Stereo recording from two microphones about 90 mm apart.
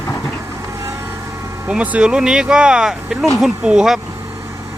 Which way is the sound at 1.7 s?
10° right (ahead or behind).